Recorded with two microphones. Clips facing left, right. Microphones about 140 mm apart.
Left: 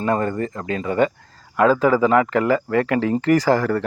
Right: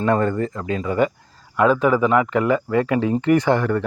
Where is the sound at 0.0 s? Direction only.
35° left (ahead or behind).